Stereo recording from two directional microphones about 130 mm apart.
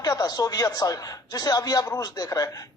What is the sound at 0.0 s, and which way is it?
A woman's voice, 30° left (ahead or behind).